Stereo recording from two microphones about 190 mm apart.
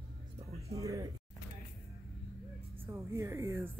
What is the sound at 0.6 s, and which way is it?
Speech, 15° right (ahead or behind).